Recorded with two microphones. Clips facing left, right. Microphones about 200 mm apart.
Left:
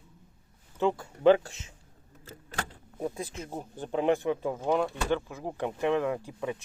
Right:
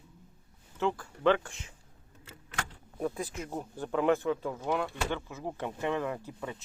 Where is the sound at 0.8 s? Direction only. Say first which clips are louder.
Left 4 dB; 15° left (ahead or behind).